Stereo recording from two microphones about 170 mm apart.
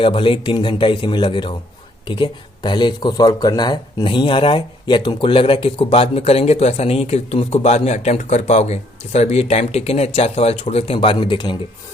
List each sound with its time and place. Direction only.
0.0 s a man's voice: 30° left (ahead or behind)